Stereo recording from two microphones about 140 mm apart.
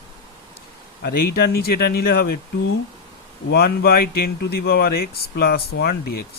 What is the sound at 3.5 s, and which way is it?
Speech, 90° left.